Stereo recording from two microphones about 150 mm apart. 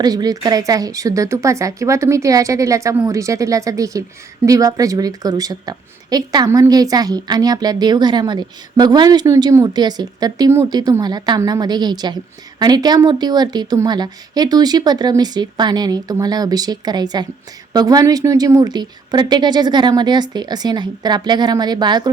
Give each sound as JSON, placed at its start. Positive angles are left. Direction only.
{"t": 0.0, "sound": "speech", "side_deg": -25}